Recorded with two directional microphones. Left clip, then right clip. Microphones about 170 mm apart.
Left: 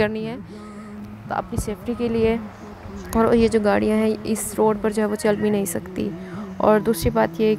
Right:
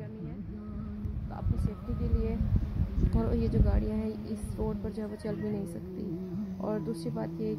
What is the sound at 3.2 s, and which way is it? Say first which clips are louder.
Speech: left 19 dB; 40° left (ahead or behind).